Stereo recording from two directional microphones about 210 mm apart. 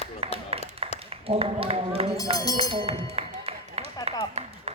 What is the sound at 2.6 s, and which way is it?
Music, 25° right (ahead or behind).